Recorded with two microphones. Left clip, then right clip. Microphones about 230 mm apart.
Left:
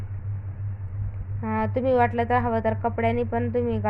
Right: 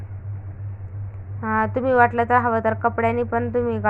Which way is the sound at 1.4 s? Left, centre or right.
Centre.